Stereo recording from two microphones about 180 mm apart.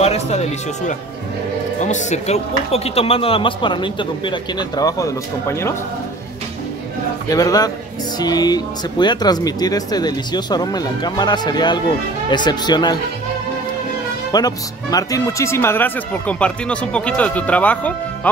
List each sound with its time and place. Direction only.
0.0 s speech: 35° left (ahead or behind); by 5.8 s 15° left (ahead or behind)
7.2 s speech: 20° left (ahead or behind)
14.3 s speech: 20° left (ahead or behind)